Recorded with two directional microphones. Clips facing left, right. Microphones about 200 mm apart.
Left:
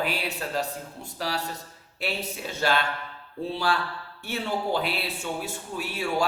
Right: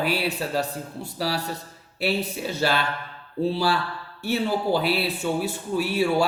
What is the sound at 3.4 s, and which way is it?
Speech, 35° right (ahead or behind).